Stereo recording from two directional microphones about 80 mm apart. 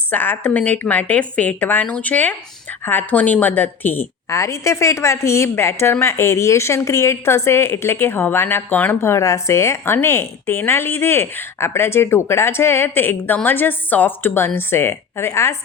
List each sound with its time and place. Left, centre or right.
0.1 s a woman's voice: left
4.4 s a woman's voice: left